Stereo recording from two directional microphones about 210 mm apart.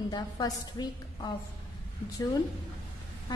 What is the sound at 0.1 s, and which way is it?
A woman's voice, 20° left (ahead or behind).